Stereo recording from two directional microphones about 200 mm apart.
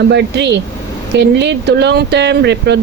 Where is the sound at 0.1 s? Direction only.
60° right (ahead or behind).